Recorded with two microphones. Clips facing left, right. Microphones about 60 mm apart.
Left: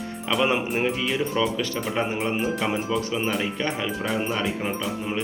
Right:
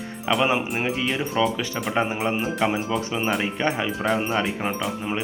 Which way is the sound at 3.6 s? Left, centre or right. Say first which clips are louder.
Right 3 dB; right.